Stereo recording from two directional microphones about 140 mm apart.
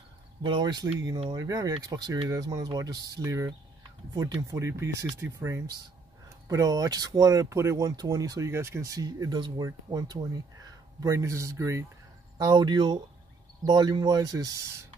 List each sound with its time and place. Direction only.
0.4 s speech: 35° right (ahead or behind)
12.4 s speech: 30° right (ahead or behind)